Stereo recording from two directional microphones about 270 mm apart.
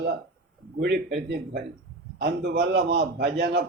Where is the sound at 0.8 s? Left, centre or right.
Right.